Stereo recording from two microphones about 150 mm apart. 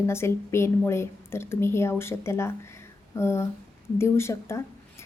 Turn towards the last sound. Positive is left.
turn(degrees=20)  # may be behind; listen again after turning